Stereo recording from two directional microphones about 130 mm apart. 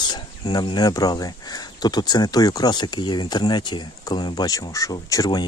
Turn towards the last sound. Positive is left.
turn(degrees=30)  # may be behind; listen again after turning